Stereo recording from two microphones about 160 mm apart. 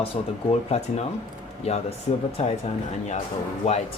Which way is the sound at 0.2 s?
40° left (ahead or behind).